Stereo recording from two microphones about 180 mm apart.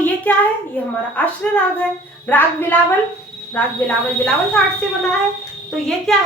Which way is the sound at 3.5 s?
10° left (ahead or behind).